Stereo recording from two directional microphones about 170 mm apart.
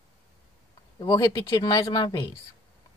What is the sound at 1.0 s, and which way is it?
A woman's voice, 20° left (ahead or behind).